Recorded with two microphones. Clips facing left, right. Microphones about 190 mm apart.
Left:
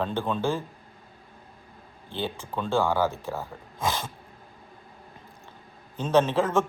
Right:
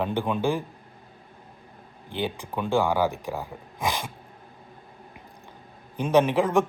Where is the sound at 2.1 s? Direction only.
15° right (ahead or behind).